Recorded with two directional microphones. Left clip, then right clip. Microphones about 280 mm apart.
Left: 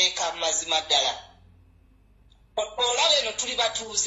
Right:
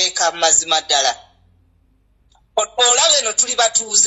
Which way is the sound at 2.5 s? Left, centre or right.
Right.